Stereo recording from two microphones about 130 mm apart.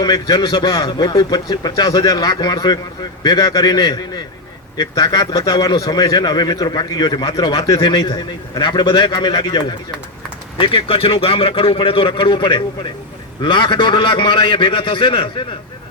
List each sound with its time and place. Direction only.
0.0 s a man's voice: 35° left (ahead or behind)